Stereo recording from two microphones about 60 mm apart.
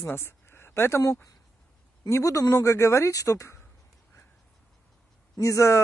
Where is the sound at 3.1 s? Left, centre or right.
Left.